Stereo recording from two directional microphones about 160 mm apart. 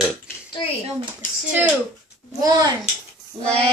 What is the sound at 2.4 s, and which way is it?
Speech, 25° right (ahead or behind).